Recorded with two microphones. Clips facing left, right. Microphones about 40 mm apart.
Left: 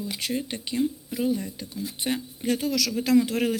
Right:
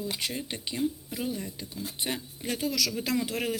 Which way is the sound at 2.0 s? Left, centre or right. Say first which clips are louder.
Left 6 dB; centre.